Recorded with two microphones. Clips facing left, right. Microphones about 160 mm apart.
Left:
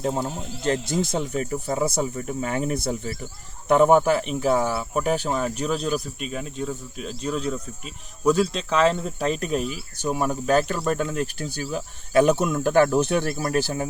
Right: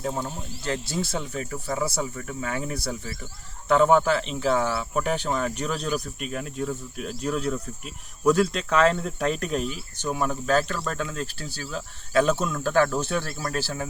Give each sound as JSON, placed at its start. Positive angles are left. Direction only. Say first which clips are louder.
{"t": 0.0, "sound": "speech", "louder": "left 4 dB", "side_deg": 25}